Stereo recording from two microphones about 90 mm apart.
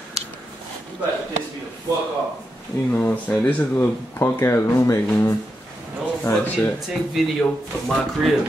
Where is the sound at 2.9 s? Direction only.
15° left (ahead or behind).